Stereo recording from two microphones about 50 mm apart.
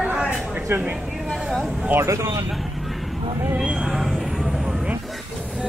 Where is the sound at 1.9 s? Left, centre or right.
Right.